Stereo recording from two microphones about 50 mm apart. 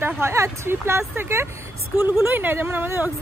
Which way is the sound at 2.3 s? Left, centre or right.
Right.